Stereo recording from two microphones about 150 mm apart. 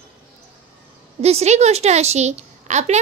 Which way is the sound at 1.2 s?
45° right (ahead or behind).